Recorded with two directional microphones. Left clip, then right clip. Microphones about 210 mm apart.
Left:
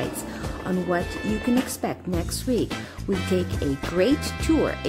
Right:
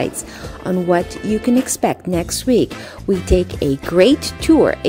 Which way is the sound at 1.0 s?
Centre (ahead or behind).